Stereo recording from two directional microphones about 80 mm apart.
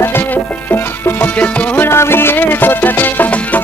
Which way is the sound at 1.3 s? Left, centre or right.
Left.